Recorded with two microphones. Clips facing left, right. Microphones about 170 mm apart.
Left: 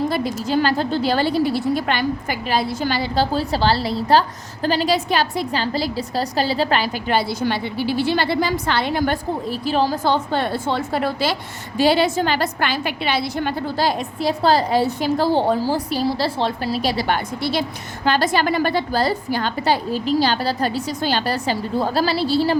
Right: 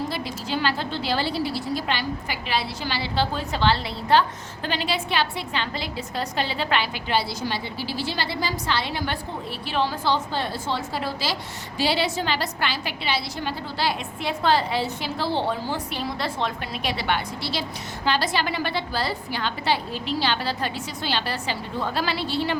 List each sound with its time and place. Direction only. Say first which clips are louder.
0.1 s a woman's voice: left 8 dB; 45° left (ahead or behind)